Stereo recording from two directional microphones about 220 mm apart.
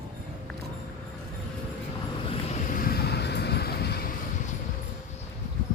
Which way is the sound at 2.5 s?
40° left (ahead or behind).